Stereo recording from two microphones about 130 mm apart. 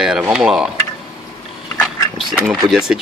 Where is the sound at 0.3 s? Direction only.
5° right (ahead or behind).